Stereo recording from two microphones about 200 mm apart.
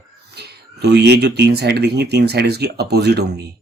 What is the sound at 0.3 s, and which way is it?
Speech, 55° right (ahead or behind).